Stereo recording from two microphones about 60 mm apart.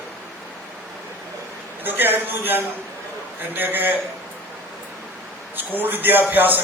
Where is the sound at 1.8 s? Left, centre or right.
Right.